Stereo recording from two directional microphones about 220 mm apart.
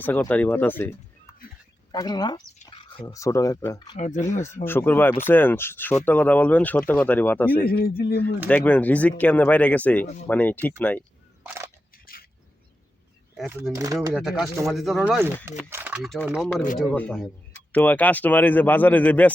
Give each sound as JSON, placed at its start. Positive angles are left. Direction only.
{"t": 0.0, "sound": "speech", "side_deg": 10}
{"t": 1.3, "sound": "a sound", "side_deg": 10}
{"t": 1.9, "sound": "speech", "side_deg": 20}
{"t": 3.9, "sound": "speech", "side_deg": 35}
{"t": 4.4, "sound": "speech", "side_deg": 10}
{"t": 7.9, "sound": "speech", "side_deg": 45}
{"t": 8.4, "sound": "speech", "side_deg": 5}
{"t": 11.4, "sound": "a sound", "side_deg": -15}
{"t": 12.1, "sound": "bird", "side_deg": 40}
{"t": 13.3, "sound": "speech", "side_deg": 0}
{"t": 13.7, "sound": "speech", "side_deg": -15}
{"t": 14.1, "sound": "speech", "side_deg": 0}